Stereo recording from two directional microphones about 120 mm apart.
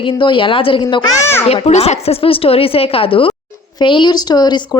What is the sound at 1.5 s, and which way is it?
A woman's voice, 60° left (ahead or behind).